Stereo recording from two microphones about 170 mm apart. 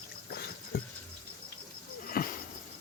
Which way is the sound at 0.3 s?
65° left (ahead or behind).